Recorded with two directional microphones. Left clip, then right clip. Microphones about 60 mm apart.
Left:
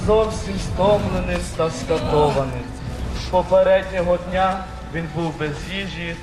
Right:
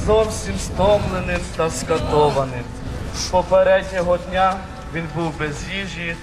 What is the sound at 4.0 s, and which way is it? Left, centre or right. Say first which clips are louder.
Speech: right 1 dB; right.